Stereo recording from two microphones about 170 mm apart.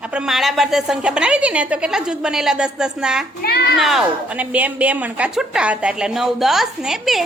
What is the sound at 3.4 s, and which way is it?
Speech, 70° left (ahead or behind).